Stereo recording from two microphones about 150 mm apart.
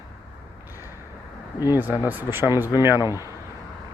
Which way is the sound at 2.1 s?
15° right (ahead or behind).